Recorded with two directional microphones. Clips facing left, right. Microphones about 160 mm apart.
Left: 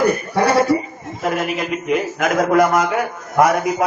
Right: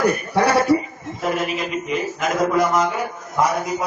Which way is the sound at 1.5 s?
60° left (ahead or behind).